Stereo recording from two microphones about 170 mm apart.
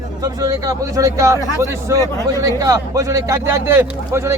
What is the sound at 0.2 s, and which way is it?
Speech, 20° right (ahead or behind).